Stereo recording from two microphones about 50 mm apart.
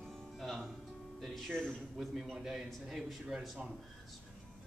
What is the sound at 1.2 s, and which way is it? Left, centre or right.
A man's voice, centre.